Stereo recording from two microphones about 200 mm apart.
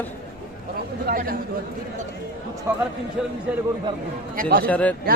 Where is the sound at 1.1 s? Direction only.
45° right (ahead or behind).